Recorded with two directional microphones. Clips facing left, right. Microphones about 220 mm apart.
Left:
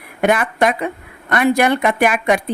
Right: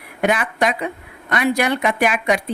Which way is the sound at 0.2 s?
50° left (ahead or behind).